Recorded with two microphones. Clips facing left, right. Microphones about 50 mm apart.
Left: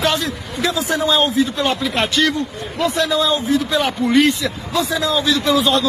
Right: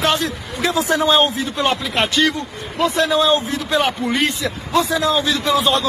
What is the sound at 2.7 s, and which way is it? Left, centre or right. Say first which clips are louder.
A man's voice: right 1 dB; right.